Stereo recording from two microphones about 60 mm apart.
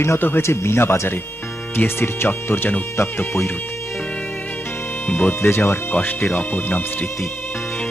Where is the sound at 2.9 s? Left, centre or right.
Left.